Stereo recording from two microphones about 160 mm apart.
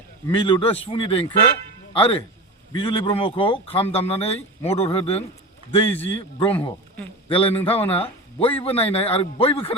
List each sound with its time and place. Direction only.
0.3 s a man's voice: 30° left (ahead or behind)